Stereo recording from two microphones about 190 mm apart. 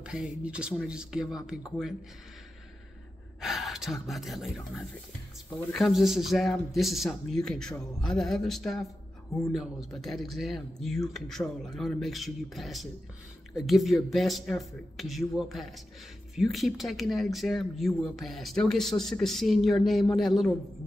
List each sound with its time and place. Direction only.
0.0 s speech: 5° right (ahead or behind)
3.3 s speech: centre (ahead or behind)